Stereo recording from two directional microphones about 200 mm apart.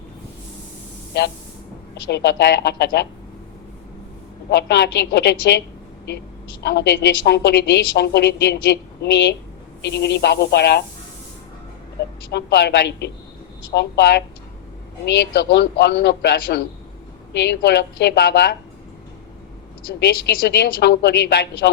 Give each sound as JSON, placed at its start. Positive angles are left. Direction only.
{"t": 1.1, "sound": "a woman's voice", "side_deg": 55}
{"t": 4.4, "sound": "a woman's voice", "side_deg": 55}
{"t": 12.3, "sound": "a woman's voice", "side_deg": 55}
{"t": 20.0, "sound": "a woman's voice", "side_deg": 50}